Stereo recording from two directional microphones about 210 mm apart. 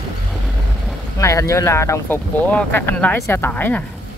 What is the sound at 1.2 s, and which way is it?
Speech, 15° left (ahead or behind).